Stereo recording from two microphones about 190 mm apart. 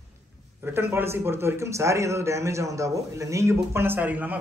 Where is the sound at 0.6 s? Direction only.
10° right (ahead or behind).